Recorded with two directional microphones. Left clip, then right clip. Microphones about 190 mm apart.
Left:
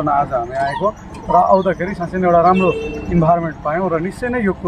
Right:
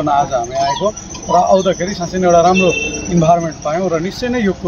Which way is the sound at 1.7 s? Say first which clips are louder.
Right 2 dB; 10° right (ahead or behind).